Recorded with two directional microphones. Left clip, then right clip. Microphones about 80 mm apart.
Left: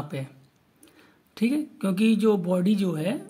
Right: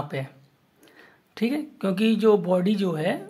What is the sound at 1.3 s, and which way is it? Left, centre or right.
Speech, left.